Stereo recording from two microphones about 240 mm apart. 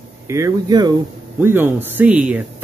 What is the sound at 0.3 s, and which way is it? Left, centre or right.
Speech, centre.